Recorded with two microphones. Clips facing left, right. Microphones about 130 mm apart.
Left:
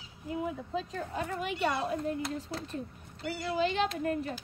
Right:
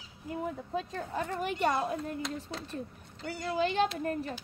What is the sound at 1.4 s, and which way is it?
Speech, 45° right (ahead or behind).